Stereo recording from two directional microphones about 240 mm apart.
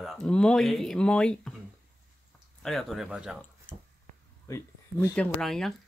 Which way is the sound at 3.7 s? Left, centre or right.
Centre.